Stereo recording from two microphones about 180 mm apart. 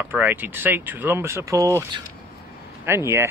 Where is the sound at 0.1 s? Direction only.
10° right (ahead or behind).